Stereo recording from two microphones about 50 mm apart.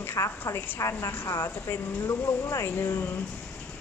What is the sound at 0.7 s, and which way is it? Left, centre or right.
Speech, left.